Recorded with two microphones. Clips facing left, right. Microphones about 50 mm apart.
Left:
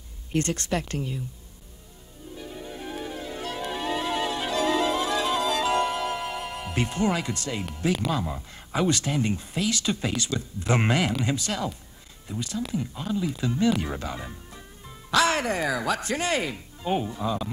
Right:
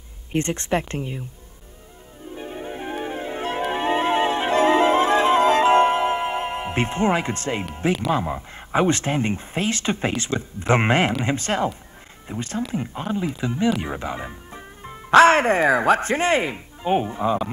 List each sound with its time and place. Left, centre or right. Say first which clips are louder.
0.3 s speech: right 4 dB; right
2.3 s music: right 6 dB; right
8.1 s speech: right 6 dB; right